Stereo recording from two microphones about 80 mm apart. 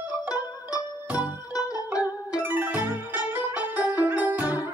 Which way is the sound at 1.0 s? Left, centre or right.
Centre.